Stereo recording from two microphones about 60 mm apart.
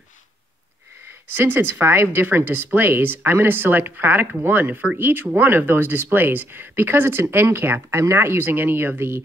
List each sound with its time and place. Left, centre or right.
1.3 s speech: right
7.9 s speech: right